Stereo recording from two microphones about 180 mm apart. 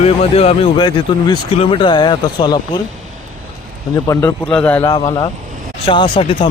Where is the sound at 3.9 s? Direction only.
15° left (ahead or behind).